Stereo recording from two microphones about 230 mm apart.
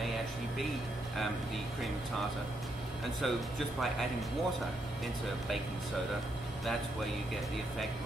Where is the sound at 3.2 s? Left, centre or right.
Centre.